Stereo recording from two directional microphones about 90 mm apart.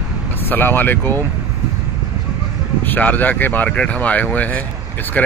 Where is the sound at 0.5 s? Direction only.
25° left (ahead or behind).